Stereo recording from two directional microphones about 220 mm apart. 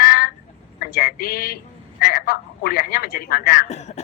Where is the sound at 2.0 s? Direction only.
40° left (ahead or behind).